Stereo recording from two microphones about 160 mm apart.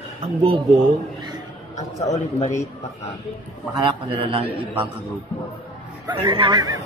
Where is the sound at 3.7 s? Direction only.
30° right (ahead or behind).